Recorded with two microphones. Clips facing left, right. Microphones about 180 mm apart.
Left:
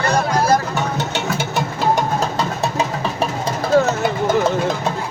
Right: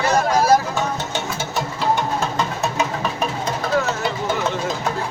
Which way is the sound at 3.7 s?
30° left (ahead or behind).